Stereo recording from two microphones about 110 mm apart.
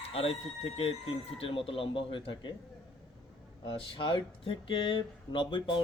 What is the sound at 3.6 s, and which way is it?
Speech, 50° left (ahead or behind).